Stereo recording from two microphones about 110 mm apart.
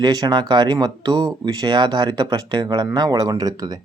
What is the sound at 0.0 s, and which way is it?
Speech, 40° right (ahead or behind).